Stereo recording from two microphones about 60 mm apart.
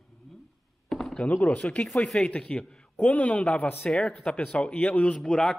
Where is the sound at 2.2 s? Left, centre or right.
Centre.